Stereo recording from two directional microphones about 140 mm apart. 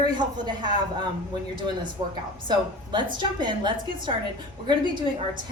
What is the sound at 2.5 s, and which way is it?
A woman's voice, 30° right (ahead or behind).